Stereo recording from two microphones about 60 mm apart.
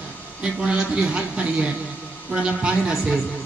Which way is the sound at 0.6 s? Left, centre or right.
Centre.